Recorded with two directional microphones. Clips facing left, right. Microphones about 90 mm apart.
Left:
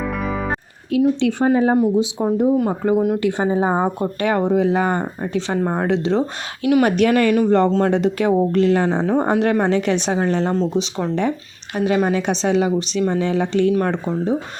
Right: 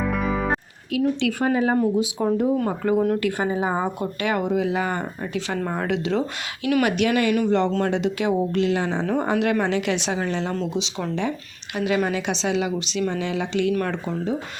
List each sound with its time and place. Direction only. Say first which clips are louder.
0.0 s music: even; centre (ahead or behind)
0.9 s speech: left 5 dB; 30° left (ahead or behind)
2.1 s speech: left 4 dB; 15° left (ahead or behind)
6.8 s speech: left 4 dB; 40° left (ahead or behind)